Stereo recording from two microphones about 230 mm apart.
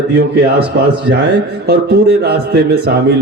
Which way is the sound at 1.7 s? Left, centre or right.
Right.